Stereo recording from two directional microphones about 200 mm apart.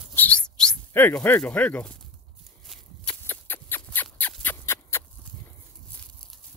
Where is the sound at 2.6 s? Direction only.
5° left (ahead or behind).